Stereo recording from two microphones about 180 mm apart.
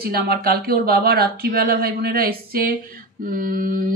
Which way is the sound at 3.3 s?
50° right (ahead or behind).